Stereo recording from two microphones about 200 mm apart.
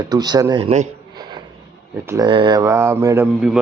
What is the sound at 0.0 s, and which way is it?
Speech, 20° right (ahead or behind).